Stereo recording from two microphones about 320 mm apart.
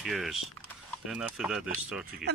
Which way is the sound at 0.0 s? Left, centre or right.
Centre.